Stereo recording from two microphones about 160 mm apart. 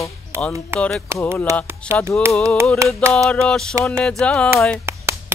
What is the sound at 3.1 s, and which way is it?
Mantra, 5° left (ahead or behind).